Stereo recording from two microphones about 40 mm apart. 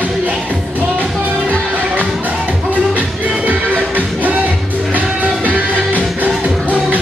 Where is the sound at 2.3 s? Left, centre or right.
Right.